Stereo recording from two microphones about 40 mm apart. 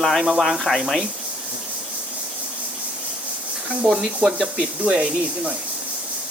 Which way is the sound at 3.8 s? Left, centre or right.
Centre.